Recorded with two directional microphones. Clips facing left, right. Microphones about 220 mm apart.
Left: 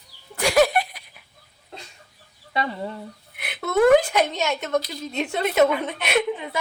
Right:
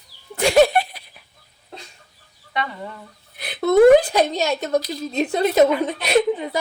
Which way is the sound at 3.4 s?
35° right (ahead or behind).